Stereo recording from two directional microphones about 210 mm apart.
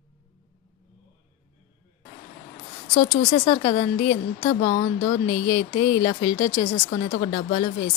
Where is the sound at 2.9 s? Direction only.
40° left (ahead or behind).